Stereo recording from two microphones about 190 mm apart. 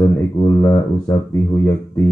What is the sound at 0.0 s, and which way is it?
Speech, 15° left (ahead or behind).